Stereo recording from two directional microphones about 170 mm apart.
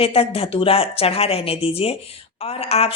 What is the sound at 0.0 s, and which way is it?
Speech, 35° left (ahead or behind).